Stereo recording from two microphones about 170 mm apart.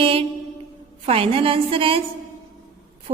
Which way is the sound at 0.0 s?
30° right (ahead or behind).